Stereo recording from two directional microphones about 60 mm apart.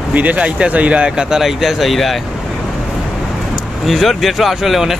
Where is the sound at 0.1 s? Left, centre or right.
Right; by 2.1 s centre.